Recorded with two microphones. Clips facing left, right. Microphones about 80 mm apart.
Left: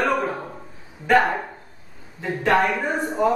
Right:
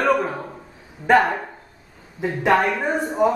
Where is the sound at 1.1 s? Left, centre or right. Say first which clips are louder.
Right 2 dB; centre.